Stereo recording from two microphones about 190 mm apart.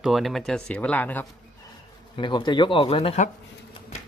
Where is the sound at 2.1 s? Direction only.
25° left (ahead or behind).